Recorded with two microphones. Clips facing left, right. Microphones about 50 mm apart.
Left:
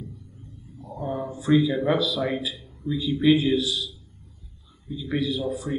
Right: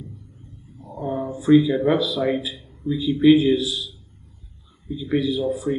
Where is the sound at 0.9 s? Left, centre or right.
Centre.